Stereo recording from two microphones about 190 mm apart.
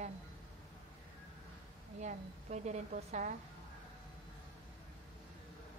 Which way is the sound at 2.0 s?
35° right (ahead or behind).